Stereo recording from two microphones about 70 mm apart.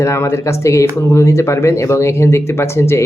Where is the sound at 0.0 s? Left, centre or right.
Left.